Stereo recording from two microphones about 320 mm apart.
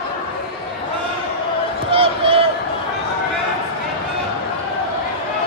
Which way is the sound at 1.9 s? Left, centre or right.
Centre.